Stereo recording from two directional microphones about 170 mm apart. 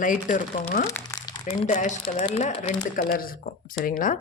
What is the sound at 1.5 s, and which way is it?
Speech, 45° left (ahead or behind).